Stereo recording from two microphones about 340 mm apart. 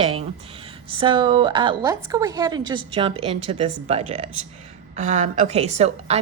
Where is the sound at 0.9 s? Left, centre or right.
Centre.